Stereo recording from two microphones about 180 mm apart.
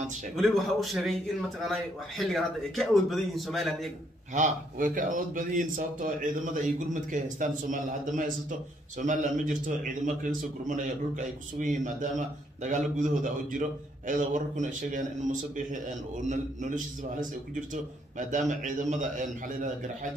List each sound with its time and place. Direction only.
0.4 s speech: centre (ahead or behind)
4.3 s a man's voice: 45° right (ahead or behind)
16.3 s a man's voice: 45° right (ahead or behind)
18.3 s a man's voice: 45° right (ahead or behind)